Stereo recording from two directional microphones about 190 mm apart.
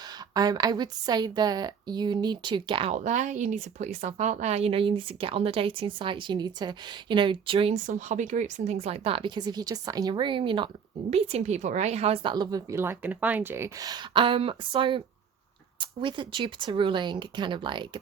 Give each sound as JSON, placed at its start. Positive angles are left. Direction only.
{"t": 0.3, "sound": "a woman's voice", "side_deg": -20}